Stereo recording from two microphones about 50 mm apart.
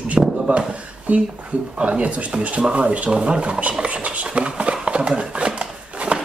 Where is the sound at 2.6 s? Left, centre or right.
Right.